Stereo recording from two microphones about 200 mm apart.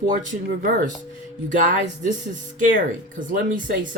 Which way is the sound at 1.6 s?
40° right (ahead or behind).